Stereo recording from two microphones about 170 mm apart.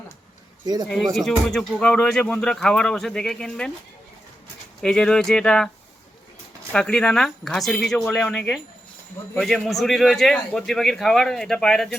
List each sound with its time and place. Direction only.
0.6 s speech: 25° right (ahead or behind)
0.9 s speech: centre (ahead or behind)
4.8 s speech: 5° left (ahead or behind)
6.7 s speech: 5° left (ahead or behind)